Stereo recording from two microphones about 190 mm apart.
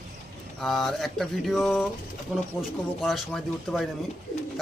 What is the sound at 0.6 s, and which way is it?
Speech, centre (ahead or behind).